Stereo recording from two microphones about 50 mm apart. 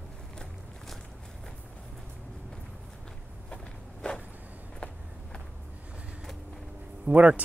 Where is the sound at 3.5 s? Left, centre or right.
Centre.